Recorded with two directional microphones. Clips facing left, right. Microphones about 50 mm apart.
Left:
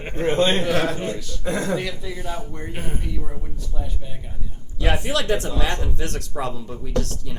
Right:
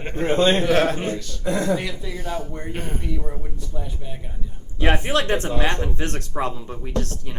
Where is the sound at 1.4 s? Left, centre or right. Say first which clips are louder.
Right 2 dB; left.